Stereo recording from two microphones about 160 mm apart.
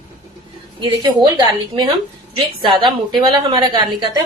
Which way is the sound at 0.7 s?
25° right (ahead or behind).